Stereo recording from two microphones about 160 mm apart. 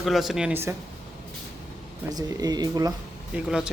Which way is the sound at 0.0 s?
Centre (ahead or behind).